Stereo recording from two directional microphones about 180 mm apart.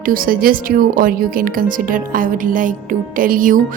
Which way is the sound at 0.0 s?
50° right (ahead or behind).